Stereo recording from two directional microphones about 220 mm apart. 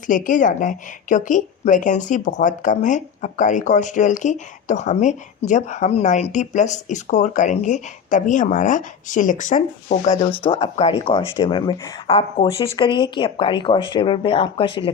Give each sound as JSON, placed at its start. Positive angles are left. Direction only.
{"t": 0.1, "sound": "a woman's voice", "side_deg": 35}